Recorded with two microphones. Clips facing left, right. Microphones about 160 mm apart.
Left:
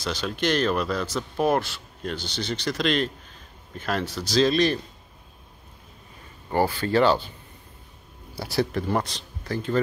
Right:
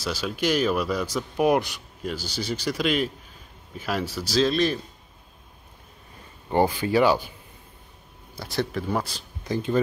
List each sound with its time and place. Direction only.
0.0 s speech: 5° right (ahead or behind)
6.5 s speech: 15° right (ahead or behind)
8.4 s speech: 5° left (ahead or behind)
9.4 s speech: 15° right (ahead or behind)